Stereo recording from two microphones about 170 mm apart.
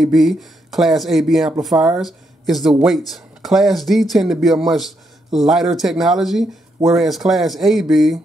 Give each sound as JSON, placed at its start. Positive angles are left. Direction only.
{"t": 0.0, "sound": "speech", "side_deg": 0}